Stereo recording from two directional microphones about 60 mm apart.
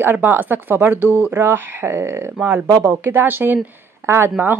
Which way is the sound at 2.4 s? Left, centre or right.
Right.